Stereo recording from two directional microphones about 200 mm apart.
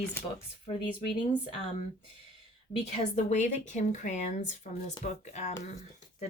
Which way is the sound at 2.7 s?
35° left (ahead or behind).